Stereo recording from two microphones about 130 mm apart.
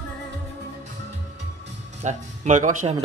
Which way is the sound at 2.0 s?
65° right (ahead or behind).